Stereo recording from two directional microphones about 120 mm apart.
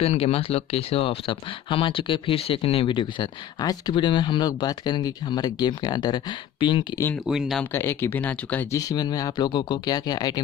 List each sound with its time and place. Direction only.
0.0 s speech: 60° left (ahead or behind); by 6.9 s 40° left (ahead or behind)
7.2 s speech: 5° right (ahead or behind)
7.7 s speech: 20° left (ahead or behind)
8.7 s speech: 35° left (ahead or behind)